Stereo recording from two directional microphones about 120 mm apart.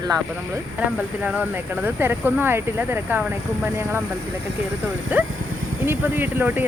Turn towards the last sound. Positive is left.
turn(degrees=-15)  # may be behind; listen again after turning